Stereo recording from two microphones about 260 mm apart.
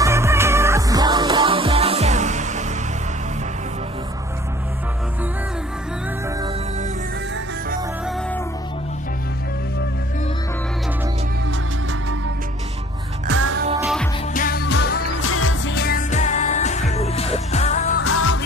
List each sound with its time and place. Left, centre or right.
0.0 s music: centre; by 2.6 s right
13.7 s music: centre
14.3 s music: left
15.2 s music: left
18.0 s music: left